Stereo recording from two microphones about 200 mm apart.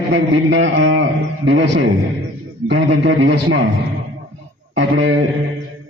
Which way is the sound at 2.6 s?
80° right.